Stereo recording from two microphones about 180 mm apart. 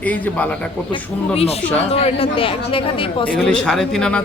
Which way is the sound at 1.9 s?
30° left (ahead or behind).